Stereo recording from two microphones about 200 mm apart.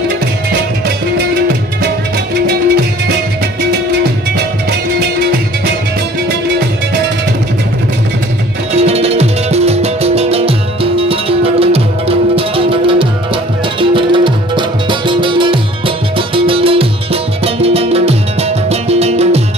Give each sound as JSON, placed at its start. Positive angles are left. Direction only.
{"t": 2.4, "sound": "music", "side_deg": -50}
{"t": 8.7, "sound": "music", "side_deg": -30}